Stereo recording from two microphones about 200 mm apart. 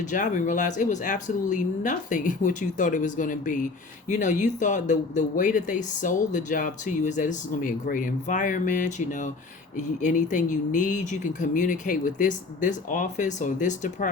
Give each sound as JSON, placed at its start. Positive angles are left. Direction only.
{"t": 0.0, "sound": "speech", "side_deg": 40}